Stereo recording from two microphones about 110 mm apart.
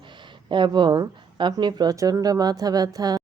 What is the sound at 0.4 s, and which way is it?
Speech, 45° right (ahead or behind).